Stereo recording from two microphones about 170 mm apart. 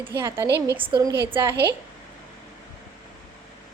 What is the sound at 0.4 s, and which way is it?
Speech, 80° right.